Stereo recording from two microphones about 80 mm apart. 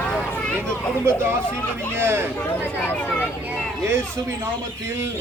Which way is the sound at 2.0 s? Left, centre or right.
Right.